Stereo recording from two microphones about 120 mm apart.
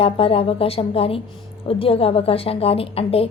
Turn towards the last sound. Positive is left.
turn(degrees=55)  # may be behind; listen again after turning